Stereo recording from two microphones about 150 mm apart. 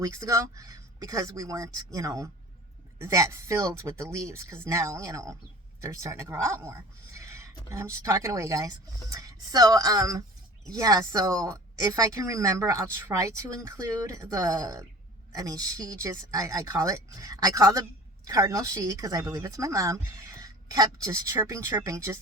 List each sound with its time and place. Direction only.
0.0 s speech: 20° right (ahead or behind)